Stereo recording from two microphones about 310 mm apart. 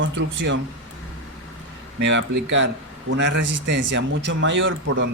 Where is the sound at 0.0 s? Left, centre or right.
Right.